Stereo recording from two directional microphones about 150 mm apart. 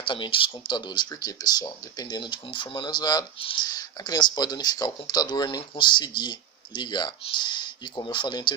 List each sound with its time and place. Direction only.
0.0 s speech: 35° left (ahead or behind)